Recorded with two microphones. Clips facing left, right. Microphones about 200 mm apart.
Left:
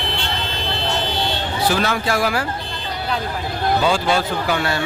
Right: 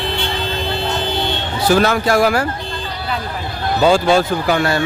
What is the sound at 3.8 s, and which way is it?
Speech, 45° right (ahead or behind).